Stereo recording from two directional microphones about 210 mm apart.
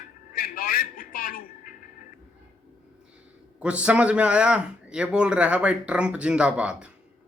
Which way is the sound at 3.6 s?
5° right (ahead or behind).